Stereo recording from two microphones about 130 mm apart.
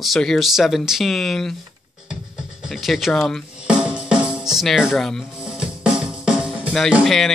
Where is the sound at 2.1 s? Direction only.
5° right (ahead or behind).